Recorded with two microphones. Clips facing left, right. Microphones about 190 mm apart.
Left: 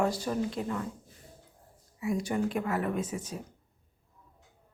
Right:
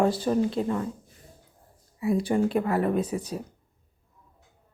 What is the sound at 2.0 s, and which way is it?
A woman's voice, 30° right (ahead or behind).